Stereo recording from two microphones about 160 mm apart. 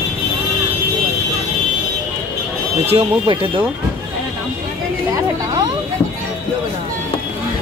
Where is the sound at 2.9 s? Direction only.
35° right (ahead or behind).